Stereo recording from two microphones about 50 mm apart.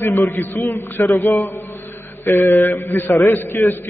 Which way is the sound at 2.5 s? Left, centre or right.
Left.